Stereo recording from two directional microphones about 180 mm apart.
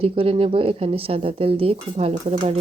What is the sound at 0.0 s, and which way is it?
A woman's voice, 30° right (ahead or behind).